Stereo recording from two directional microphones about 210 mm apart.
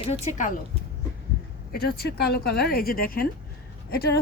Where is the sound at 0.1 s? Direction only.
35° left (ahead or behind).